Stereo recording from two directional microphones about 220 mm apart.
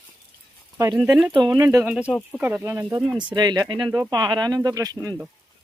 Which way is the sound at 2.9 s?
20° right (ahead or behind).